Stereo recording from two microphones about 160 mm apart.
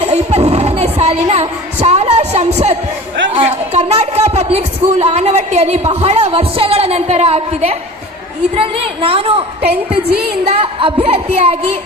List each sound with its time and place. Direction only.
0.0 s a sound: 40° right (ahead or behind)
3.3 s a woman's voice: 40° right (ahead or behind)
10.1 s a woman's voice: 80° right
10.4 s a woman's voice: 35° right (ahead or behind)